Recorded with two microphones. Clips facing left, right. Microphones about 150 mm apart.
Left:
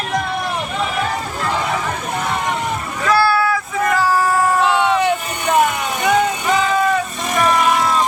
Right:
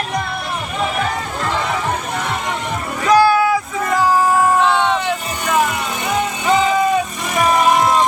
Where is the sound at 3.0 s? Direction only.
15° right (ahead or behind).